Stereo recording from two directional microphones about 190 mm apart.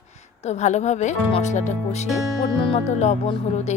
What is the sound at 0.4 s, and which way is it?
Speech, 35° left (ahead or behind).